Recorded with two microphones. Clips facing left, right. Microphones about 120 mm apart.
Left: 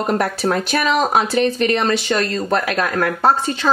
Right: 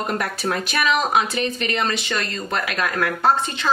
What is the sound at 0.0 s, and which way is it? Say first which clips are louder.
Speech: left 6 dB; 35° left (ahead or behind).